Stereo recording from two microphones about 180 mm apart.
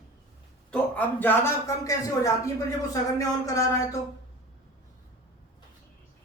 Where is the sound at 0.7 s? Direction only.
10° left (ahead or behind).